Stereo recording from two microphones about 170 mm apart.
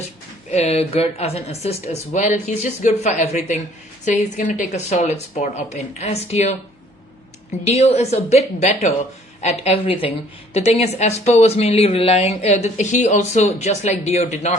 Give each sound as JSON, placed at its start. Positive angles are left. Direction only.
{"t": 0.5, "sound": "speech", "side_deg": 40}
{"t": 7.6, "sound": "speech", "side_deg": 40}